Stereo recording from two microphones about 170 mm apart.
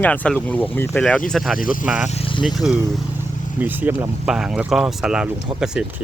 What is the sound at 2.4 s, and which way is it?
Speech, centre (ahead or behind).